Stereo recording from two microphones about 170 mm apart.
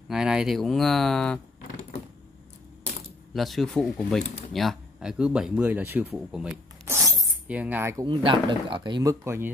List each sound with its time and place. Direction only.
0.1 s speech: 5° right (ahead or behind)
3.3 s speech: centre (ahead or behind)
7.0 s shatter: 20° right (ahead or behind)
7.4 s speech: 10° right (ahead or behind); by 9.1 s 25° right (ahead or behind)
9.2 s speech: 15° right (ahead or behind)